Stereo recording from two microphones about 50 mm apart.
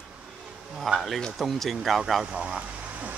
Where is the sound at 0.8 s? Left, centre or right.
Centre.